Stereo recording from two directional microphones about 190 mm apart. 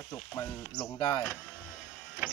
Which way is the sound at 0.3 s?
15° left (ahead or behind).